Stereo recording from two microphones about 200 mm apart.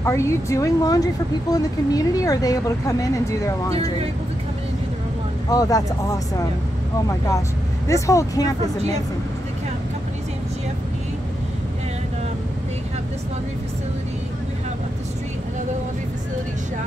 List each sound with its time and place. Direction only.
0.0 s speech: 15° left (ahead or behind)
5.5 s speech: 15° left (ahead or behind)
7.9 s speech: 15° left (ahead or behind)